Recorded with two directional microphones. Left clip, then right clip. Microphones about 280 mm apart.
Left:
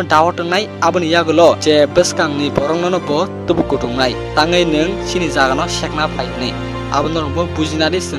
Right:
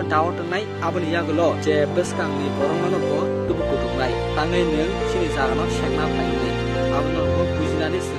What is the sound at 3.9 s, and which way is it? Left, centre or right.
Speech, left.